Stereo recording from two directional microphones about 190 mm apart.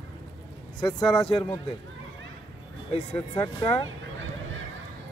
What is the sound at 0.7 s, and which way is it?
Speech, 20° left (ahead or behind).